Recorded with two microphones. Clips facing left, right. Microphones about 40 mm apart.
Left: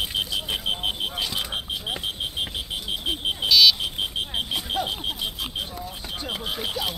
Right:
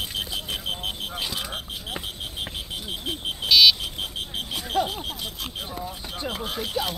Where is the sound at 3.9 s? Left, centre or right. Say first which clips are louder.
Left 4 dB; left.